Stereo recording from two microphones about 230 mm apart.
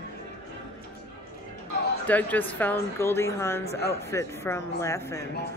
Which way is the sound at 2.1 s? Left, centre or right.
Centre.